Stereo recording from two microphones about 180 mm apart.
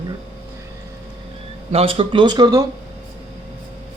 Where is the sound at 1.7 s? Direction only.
30° right (ahead or behind).